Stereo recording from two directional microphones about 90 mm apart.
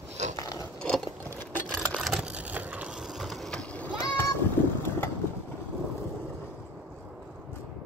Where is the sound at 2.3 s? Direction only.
15° right (ahead or behind); by 3.9 s 10° left (ahead or behind).